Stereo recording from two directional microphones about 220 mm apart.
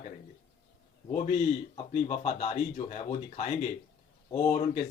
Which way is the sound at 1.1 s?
30° left (ahead or behind).